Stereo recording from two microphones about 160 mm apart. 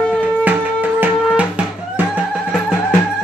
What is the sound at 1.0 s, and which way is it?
Music, 10° right (ahead or behind).